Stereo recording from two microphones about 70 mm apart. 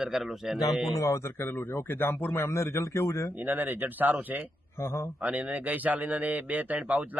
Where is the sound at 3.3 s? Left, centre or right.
Right.